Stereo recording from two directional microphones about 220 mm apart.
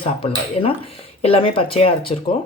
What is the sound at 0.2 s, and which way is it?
Speech, 25° left (ahead or behind).